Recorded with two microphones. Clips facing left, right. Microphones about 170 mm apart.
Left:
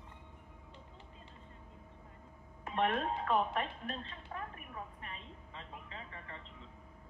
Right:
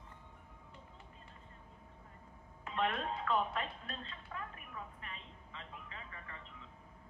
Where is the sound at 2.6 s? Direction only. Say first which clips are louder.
Left 3 dB; 35° left (ahead or behind).